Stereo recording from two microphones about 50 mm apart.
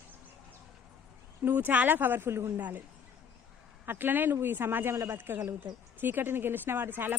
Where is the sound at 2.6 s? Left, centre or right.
Right.